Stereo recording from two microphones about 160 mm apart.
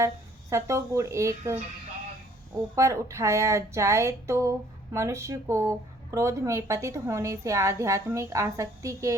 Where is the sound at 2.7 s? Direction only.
20° right (ahead or behind).